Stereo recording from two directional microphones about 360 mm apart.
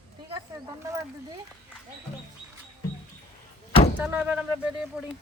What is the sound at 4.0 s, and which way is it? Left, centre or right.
Speech, centre.